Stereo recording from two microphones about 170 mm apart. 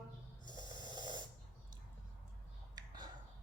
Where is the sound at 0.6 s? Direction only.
25° right (ahead or behind).